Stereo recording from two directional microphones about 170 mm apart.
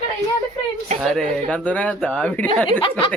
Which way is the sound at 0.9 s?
Centre (ahead or behind).